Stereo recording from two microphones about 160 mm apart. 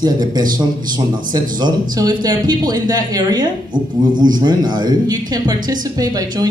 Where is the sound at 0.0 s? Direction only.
25° right (ahead or behind).